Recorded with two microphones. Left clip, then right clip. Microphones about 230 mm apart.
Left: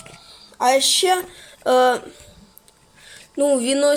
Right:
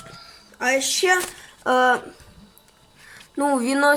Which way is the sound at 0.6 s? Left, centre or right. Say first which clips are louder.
Left 5 dB; left.